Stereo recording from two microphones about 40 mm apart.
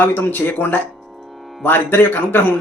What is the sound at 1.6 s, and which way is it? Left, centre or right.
Speech, left.